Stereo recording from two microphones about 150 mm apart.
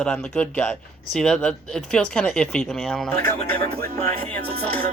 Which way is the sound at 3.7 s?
90° right.